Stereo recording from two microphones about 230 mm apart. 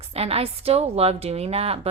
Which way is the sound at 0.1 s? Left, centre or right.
Right.